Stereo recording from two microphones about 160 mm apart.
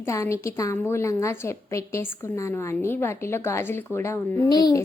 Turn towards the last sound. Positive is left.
turn(degrees=25)  # may be behind; listen again after turning